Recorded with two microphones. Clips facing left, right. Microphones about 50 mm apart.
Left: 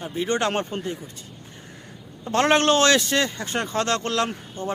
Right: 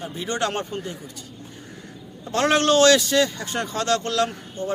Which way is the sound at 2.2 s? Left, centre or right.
Left.